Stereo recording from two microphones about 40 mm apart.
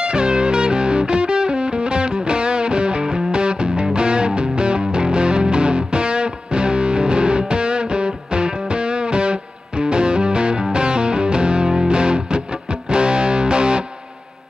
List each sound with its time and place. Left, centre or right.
0.0 s music: right